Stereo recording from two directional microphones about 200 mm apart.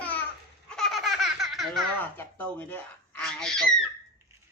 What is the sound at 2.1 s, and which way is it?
Speech, 10° left (ahead or behind).